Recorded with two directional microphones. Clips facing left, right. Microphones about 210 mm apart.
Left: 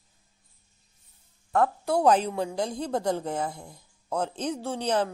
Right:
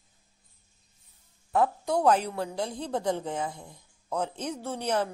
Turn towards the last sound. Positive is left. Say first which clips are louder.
# left 3 dB
turn(degrees=15)  # may be behind; listen again after turning